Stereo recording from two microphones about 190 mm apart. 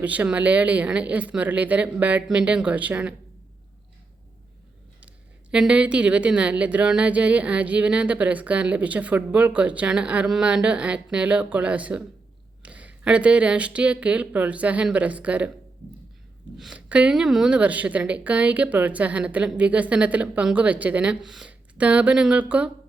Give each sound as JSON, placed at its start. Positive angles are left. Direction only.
{"t": 0.0, "sound": "a woman's voice", "side_deg": -5}
{"t": 4.9, "sound": "a woman's voice", "side_deg": -5}
{"t": 16.6, "sound": "a woman's voice", "side_deg": -5}